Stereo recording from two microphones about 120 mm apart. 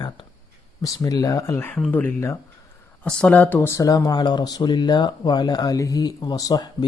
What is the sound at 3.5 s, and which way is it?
Speech, 25° left (ahead or behind).